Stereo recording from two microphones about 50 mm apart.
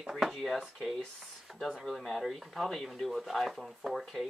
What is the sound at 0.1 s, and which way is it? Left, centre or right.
Speech, centre.